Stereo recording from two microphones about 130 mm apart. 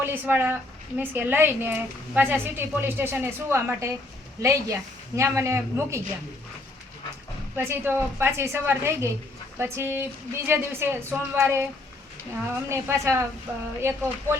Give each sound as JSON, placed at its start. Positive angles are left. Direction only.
{"t": 0.0, "sound": "a woman's voice", "side_deg": -15}
{"t": 7.5, "sound": "a woman's voice", "side_deg": -20}
{"t": 12.6, "sound": "a woman's voice", "side_deg": -20}
{"t": 13.5, "sound": "a woman's voice", "side_deg": -10}